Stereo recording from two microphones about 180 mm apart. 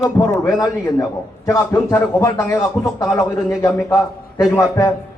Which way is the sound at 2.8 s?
Centre (ahead or behind).